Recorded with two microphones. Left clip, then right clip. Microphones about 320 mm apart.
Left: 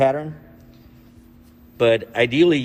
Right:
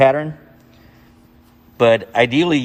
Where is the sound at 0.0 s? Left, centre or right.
Right.